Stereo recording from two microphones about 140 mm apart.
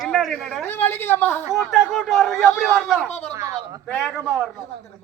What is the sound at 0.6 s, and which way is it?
Speech, 15° left (ahead or behind).